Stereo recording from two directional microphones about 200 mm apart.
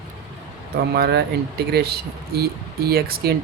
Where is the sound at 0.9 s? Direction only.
55° right (ahead or behind).